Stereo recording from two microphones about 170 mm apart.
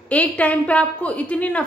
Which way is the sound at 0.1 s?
10° left (ahead or behind).